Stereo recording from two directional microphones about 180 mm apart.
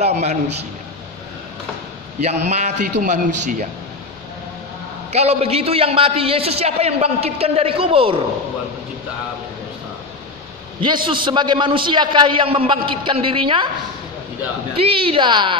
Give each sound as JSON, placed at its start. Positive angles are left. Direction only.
{"t": 0.0, "sound": "a man's voice", "side_deg": -40}
{"t": 2.1, "sound": "a man's voice", "side_deg": -40}
{"t": 5.1, "sound": "a man's voice", "side_deg": -35}
{"t": 10.8, "sound": "a man's voice", "side_deg": -25}
{"t": 14.8, "sound": "a man's voice", "side_deg": -30}